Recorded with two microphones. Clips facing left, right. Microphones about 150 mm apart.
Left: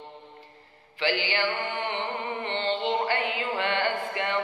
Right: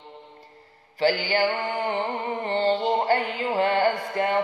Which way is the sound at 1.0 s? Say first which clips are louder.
Right 5 dB; 45° right (ahead or behind).